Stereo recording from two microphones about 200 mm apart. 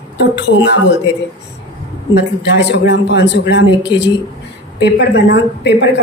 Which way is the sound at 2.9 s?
60° left (ahead or behind).